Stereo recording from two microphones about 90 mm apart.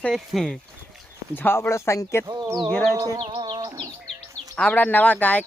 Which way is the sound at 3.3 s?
65° right (ahead or behind).